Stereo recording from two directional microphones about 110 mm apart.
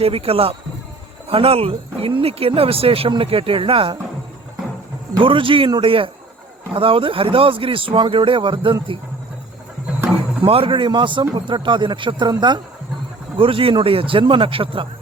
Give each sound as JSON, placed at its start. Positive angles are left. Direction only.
{"t": 0.0, "sound": "speech", "side_deg": -60}
{"t": 5.1, "sound": "speech", "side_deg": -50}
{"t": 10.4, "sound": "speech", "side_deg": -55}
{"t": 13.3, "sound": "speech", "side_deg": -55}